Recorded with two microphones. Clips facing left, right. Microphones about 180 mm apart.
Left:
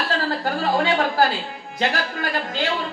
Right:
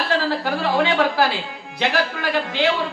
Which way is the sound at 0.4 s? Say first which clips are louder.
Right 1 dB; 45° left (ahead or behind).